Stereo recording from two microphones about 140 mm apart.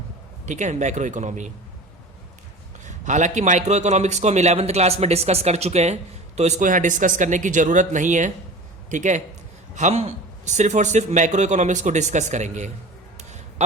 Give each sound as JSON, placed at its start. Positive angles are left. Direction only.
{"t": 0.4, "sound": "a man's voice", "side_deg": -60}
{"t": 2.8, "sound": "a man's voice", "side_deg": -60}
{"t": 13.1, "sound": "a sound", "side_deg": -55}